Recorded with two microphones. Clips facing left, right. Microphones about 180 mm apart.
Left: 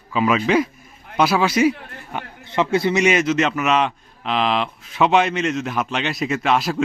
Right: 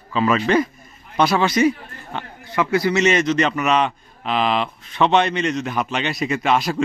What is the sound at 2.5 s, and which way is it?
Speech, 25° left (ahead or behind).